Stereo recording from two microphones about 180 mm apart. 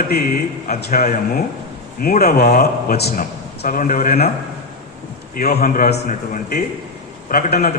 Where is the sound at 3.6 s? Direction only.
50° left (ahead or behind).